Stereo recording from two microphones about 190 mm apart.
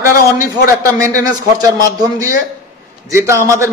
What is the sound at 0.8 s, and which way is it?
Speech, 15° right (ahead or behind).